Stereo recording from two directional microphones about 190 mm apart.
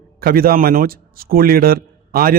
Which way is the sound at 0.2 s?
50° right (ahead or behind).